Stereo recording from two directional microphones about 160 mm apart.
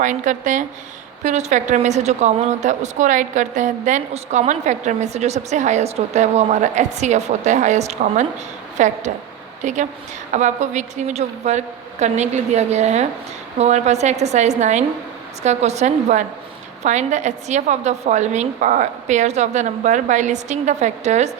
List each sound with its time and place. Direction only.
0.0 s a woman's voice: 50° right (ahead or behind)